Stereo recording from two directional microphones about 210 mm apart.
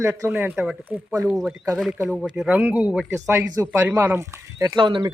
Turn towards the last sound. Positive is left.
turn(degrees=-20)  # may be behind; listen again after turning